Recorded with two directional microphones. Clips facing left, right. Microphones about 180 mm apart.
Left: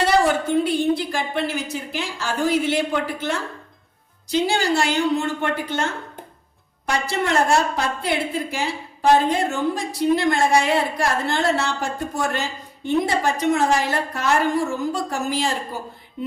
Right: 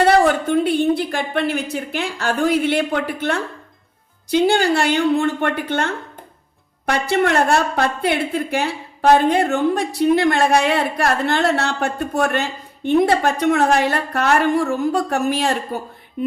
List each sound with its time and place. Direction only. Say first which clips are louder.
0.0 s a woman's voice: right 4 dB; 55° right (ahead or behind)